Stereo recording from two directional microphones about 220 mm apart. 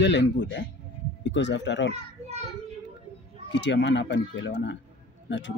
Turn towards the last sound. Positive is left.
turn(degrees=55)  # may be behind; listen again after turning